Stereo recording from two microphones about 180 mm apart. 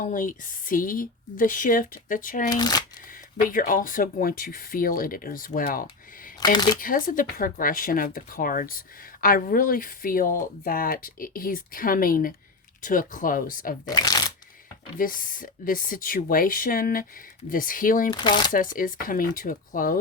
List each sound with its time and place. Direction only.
0.0 s speech: 45° left (ahead or behind)
2.5 s speech: 20° left (ahead or behind)
3.5 s speech: 50° left (ahead or behind)
6.4 s speech: 25° left (ahead or behind)
6.7 s speech: 50° left (ahead or behind)
13.8 s speech: 20° left (ahead or behind)
14.9 s speech: 50° left (ahead or behind)
18.1 s speech: 25° left (ahead or behind)
18.5 s speech: 50° left (ahead or behind)